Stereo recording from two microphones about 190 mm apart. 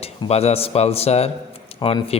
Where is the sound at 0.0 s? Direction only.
35° left (ahead or behind).